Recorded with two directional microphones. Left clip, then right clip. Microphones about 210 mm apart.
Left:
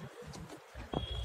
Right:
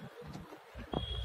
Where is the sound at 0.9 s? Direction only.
20° right (ahead or behind).